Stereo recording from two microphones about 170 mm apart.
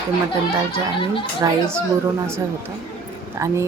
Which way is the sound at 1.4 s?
15° right (ahead or behind).